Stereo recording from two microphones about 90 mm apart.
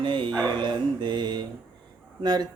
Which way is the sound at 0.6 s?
55° right (ahead or behind).